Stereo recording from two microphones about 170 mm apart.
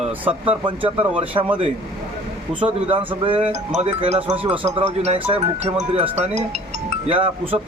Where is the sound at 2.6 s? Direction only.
30° right (ahead or behind).